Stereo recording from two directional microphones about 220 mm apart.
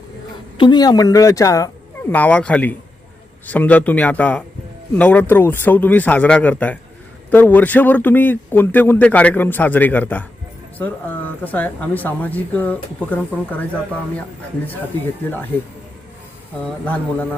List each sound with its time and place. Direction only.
0.5 s a man's voice: 20° left (ahead or behind)
14.7 s a man's voice: 10° left (ahead or behind)
16.8 s a man's voice: 5° left (ahead or behind)